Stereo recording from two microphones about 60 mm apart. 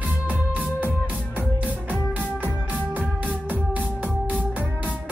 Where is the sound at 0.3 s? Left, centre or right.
Right.